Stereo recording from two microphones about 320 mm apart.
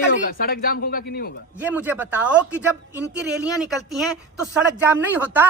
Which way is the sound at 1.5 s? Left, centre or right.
Centre.